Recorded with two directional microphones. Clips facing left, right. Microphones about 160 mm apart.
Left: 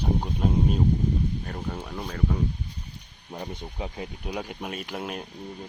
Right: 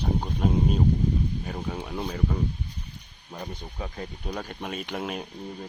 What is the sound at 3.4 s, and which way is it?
Speech, 20° left (ahead or behind).